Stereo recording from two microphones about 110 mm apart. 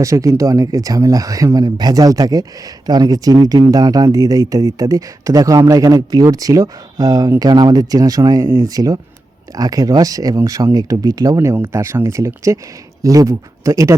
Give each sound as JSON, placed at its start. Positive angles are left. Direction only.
{"t": 0.0, "sound": "speech", "side_deg": -30}